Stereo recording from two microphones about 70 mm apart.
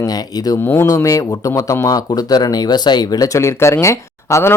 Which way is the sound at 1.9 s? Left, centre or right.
Left.